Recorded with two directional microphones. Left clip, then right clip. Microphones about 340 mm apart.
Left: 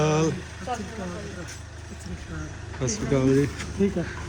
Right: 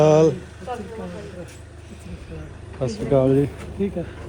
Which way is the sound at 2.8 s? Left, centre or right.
Centre.